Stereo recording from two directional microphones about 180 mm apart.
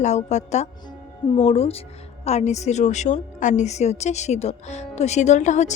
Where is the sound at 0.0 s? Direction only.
40° left (ahead or behind).